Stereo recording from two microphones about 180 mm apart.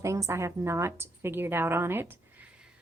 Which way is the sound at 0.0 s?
15° right (ahead or behind).